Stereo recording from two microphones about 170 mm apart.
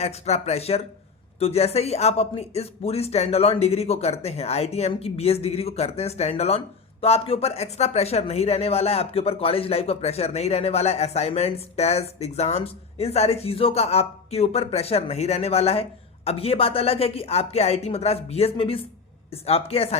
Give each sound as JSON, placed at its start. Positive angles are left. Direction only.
{"t": 0.0, "sound": "speech", "side_deg": 40}